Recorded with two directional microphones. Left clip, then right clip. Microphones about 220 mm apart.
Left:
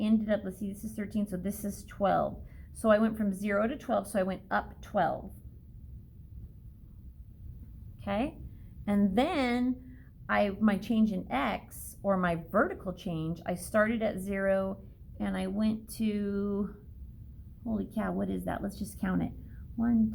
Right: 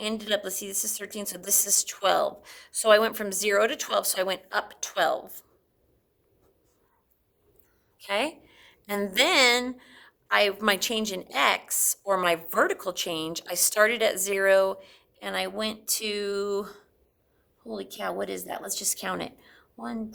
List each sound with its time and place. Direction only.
0.0 s a woman's voice: 35° right (ahead or behind)
8.0 s a woman's voice: 40° right (ahead or behind)